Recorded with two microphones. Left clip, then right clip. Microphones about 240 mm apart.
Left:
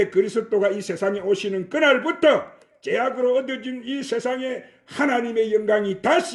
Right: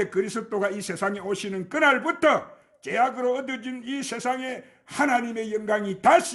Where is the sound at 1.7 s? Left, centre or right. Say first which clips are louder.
Left 2 dB; right.